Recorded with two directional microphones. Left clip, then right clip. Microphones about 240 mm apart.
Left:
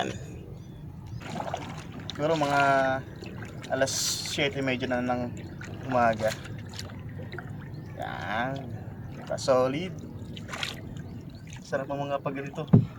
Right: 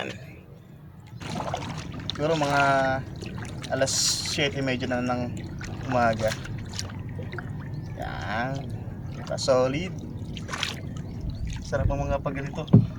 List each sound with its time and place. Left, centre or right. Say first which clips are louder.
1.3 s boat: right 3 dB; centre
2.2 s speech: right 1 dB; centre
6.1 s boat: right 2 dB; centre
7.9 s livestock: right 1 dB; centre
9.3 s speech: right 2 dB; centre
10.5 s boat: right 4 dB; centre
11.7 s speech: right 2 dB; centre